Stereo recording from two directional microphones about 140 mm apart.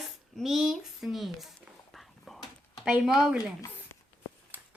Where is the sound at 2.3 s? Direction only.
Centre (ahead or behind).